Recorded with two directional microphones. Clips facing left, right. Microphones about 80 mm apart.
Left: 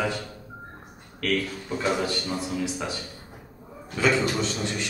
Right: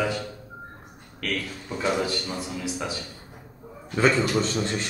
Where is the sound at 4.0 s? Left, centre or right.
Right.